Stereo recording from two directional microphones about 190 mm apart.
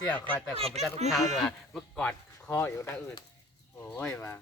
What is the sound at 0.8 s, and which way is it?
Speech, 35° right (ahead or behind).